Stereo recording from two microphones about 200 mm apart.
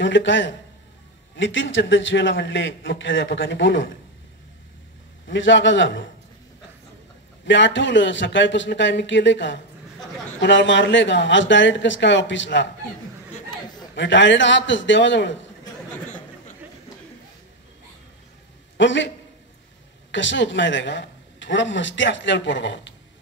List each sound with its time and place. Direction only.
0.0 s a man's voice: 65° left (ahead or behind)
5.3 s a man's voice: 65° left (ahead or behind)
7.4 s a man's voice: 65° left (ahead or behind)
13.9 s a man's voice: 65° left (ahead or behind)
18.8 s a man's voice: 65° left (ahead or behind)